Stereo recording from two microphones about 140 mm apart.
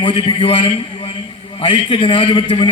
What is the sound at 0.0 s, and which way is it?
A man's voice, 40° left (ahead or behind).